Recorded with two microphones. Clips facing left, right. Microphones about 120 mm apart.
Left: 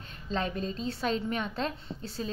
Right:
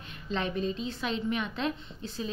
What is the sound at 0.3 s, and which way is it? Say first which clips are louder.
A woman's voice: right 1 dB; 40° left (ahead or behind).